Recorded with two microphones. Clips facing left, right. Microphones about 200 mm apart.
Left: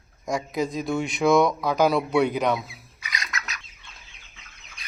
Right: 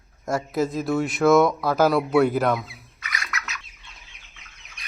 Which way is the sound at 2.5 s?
15° left (ahead or behind).